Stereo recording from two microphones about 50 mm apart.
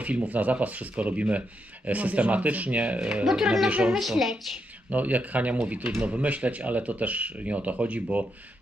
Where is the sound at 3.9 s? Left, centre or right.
Centre.